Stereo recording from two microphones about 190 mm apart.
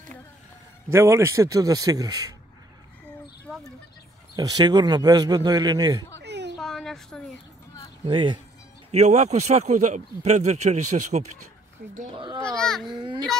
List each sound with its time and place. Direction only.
0.9 s a man's voice: 15° right (ahead or behind)
4.4 s a man's voice: 20° right (ahead or behind)
6.2 s a sound: 65° right (ahead or behind)
6.6 s a sound: centre (ahead or behind)
8.0 s a man's voice: 25° right (ahead or behind)
8.9 s speech: 35° right (ahead or behind)
12.1 s a man's voice: 25° right (ahead or behind)
12.4 s a child's voice: 5° left (ahead or behind)